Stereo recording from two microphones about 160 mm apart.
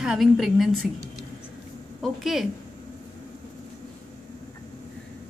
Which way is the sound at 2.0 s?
Centre (ahead or behind).